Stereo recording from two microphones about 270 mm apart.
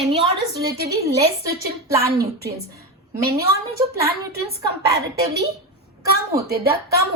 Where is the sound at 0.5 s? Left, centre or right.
Right.